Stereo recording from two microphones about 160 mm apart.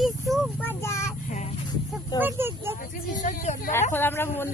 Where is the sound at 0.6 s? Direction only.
15° left (ahead or behind).